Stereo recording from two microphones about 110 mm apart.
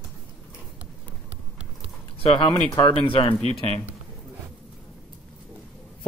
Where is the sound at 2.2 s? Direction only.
55° left (ahead or behind).